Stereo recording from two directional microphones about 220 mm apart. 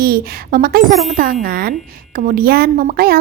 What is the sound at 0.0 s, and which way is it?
A woman's voice, 45° right (ahead or behind).